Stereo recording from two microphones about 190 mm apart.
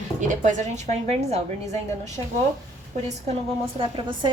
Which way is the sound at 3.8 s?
25° right (ahead or behind).